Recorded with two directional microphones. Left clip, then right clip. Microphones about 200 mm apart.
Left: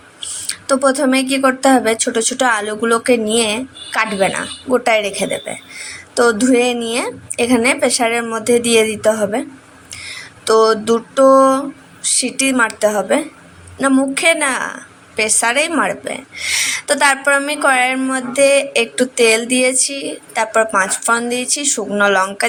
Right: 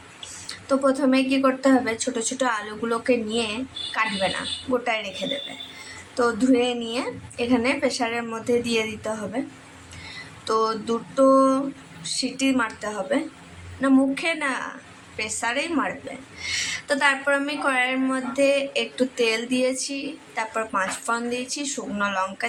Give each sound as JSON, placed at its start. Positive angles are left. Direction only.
{"t": 0.4, "sound": "a woman's voice", "side_deg": 25}
{"t": 6.1, "sound": "a woman's voice", "side_deg": 25}
{"t": 10.4, "sound": "a woman's voice", "side_deg": 25}